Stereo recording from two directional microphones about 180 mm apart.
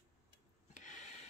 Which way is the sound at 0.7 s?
40° left (ahead or behind).